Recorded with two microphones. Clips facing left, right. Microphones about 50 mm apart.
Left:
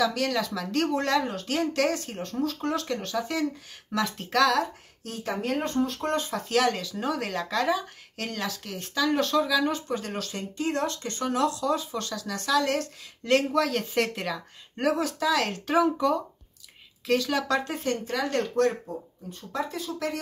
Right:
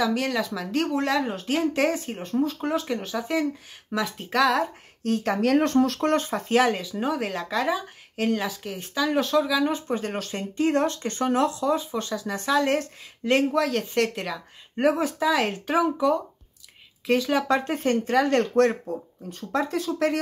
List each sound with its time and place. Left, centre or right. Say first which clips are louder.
0.0 s speech: right 1 dB; centre
5.0 s speech: right 8 dB; right
5.4 s speech: right 6 dB; right
5.9 s speech: right 5 dB; right
6.5 s speech: right 3 dB; centre
9.8 s speech: right 3 dB; right
13.2 s speech: right 2 dB; centre
14.8 s speech: right 3 dB; right
17.6 s speech: right 5 dB; right
19.3 s speech: right 6 dB; right
19.9 s speech: right 7 dB; right